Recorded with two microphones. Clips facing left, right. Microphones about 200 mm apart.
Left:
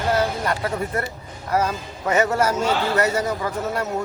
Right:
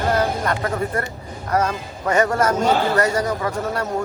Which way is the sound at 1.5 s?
10° left (ahead or behind).